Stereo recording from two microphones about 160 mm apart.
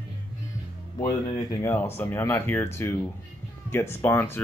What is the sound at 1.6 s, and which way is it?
Speech, 15° left (ahead or behind).